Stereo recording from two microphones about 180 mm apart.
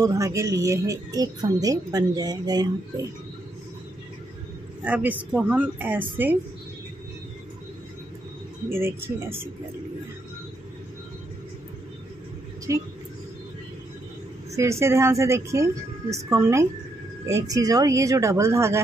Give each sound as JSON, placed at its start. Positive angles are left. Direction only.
{"t": 0.0, "sound": "speech", "side_deg": -20}
{"t": 4.8, "sound": "speech", "side_deg": -10}
{"t": 8.6, "sound": "speech", "side_deg": -15}
{"t": 12.7, "sound": "speech", "side_deg": -20}
{"t": 14.5, "sound": "speech", "side_deg": -15}